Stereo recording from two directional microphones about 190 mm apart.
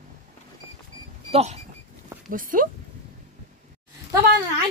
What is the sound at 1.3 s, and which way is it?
Speech, 35° right (ahead or behind).